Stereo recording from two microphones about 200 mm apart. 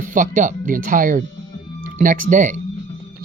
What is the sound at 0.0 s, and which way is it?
Speech, 40° right (ahead or behind).